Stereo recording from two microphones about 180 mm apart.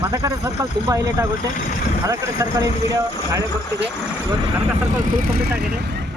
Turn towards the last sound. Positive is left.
turn(degrees=-60)  # may be behind; listen again after turning